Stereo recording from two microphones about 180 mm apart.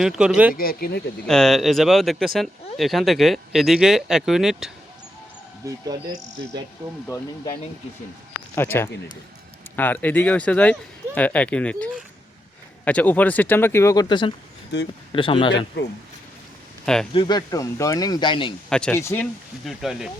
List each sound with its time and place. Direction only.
0.0 s speech: 5° right (ahead or behind)
0.5 s speech: 55° left (ahead or behind)
1.3 s speech: 5° left (ahead or behind)
5.6 s speech: 20° right (ahead or behind)
8.5 s speech: 10° left (ahead or behind)
14.7 s speech: 70° left (ahead or behind)
15.1 s speech: 30° left (ahead or behind)
16.8 s speech: 5° left (ahead or behind)
17.2 s speech: 25° left (ahead or behind)
18.7 s speech: 5° left (ahead or behind)
18.9 s speech: 15° left (ahead or behind)
19.2 s speech: centre (ahead or behind)